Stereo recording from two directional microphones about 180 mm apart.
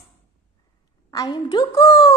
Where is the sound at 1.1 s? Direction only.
20° left (ahead or behind).